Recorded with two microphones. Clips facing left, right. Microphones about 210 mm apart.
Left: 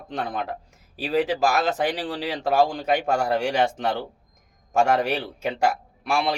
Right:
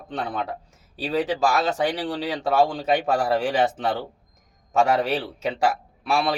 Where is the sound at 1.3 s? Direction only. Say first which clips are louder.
Even; 15° left (ahead or behind).